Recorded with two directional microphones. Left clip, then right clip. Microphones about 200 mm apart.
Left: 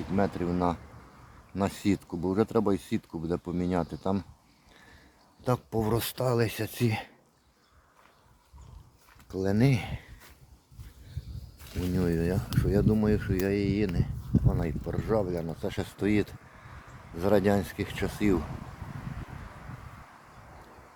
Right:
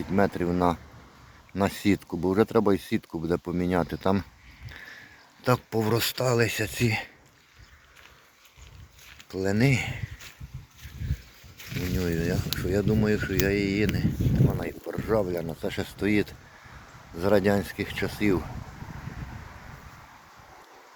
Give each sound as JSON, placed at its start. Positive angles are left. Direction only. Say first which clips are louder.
{"t": 0.2, "sound": "speech", "louder": "right 4 dB", "side_deg": -10}
{"t": 5.4, "sound": "speech", "louder": "right 4 dB", "side_deg": 0}
{"t": 9.3, "sound": "speech", "louder": "right 3 dB", "side_deg": 10}
{"t": 11.9, "sound": "speech", "louder": "even", "side_deg": 20}